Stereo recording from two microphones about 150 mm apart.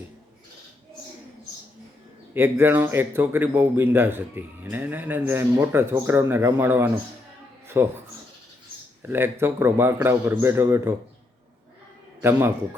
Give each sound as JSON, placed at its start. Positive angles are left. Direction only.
{"t": 2.3, "sound": "speech", "side_deg": -15}
{"t": 9.0, "sound": "speech", "side_deg": -15}